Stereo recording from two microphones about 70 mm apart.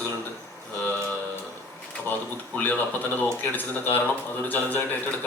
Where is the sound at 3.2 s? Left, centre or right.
Left.